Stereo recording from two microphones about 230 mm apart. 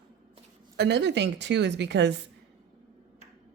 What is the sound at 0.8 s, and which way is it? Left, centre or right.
Speech, right.